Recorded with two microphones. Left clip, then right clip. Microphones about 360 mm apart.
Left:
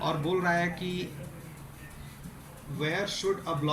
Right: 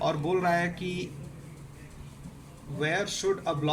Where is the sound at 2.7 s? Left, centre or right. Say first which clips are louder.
Right 2 dB; right.